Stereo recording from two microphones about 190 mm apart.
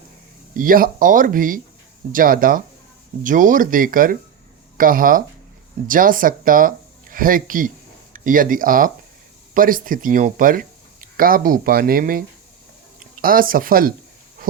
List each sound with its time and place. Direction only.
0.5 s speech: 45° right (ahead or behind)